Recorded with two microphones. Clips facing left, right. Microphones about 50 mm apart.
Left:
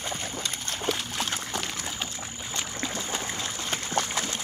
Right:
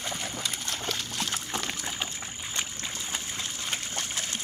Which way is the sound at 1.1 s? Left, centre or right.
Left.